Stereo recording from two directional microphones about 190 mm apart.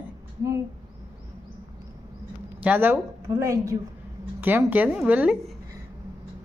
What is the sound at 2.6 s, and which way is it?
Speech, 10° right (ahead or behind).